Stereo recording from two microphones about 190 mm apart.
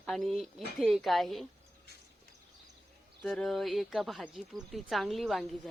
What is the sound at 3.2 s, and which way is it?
Speech, centre (ahead or behind).